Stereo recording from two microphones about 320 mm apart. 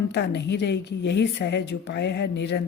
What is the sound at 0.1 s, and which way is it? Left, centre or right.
Speech, left.